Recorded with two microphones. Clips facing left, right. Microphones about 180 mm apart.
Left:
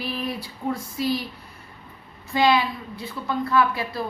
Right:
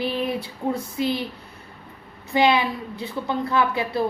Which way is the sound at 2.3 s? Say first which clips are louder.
Right 1 dB; 25° right (ahead or behind).